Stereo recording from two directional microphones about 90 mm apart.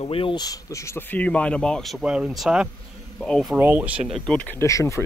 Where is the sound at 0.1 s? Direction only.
80° left.